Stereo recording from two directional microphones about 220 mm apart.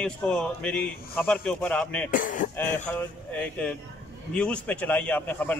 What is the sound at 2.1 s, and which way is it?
Speech, 35° left (ahead or behind).